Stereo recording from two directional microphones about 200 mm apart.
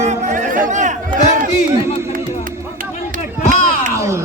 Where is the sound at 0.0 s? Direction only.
35° right (ahead or behind).